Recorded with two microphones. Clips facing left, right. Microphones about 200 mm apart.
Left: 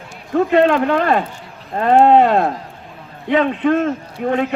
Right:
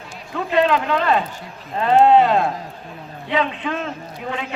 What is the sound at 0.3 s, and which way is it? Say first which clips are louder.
A man's voice: left 5 dB; 50° left (ahead or behind).